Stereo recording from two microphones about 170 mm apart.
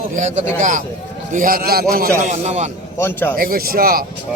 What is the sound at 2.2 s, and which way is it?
Speech, 45° right (ahead or behind).